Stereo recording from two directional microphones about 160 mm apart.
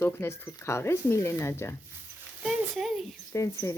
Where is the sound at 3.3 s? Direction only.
20° left (ahead or behind).